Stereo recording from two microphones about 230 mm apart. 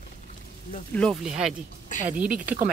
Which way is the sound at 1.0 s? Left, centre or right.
Centre.